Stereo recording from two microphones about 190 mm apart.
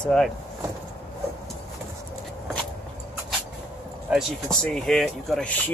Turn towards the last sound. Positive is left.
turn(degrees=0)  # may be behind; listen again after turning